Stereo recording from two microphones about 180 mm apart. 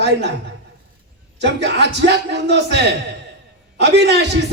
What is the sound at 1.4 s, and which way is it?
A man's voice, 75° right (ahead or behind).